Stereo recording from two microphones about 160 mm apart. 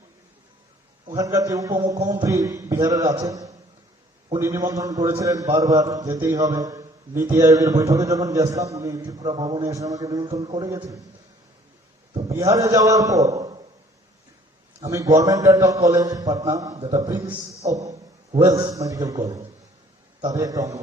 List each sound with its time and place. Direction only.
1.0 s a man's voice: 20° right (ahead or behind)
12.3 s a man's voice: 20° right (ahead or behind)
14.8 s a man's voice: 20° right (ahead or behind)
17.7 s a sound: 40° right (ahead or behind)
18.4 s a man's voice: 20° right (ahead or behind)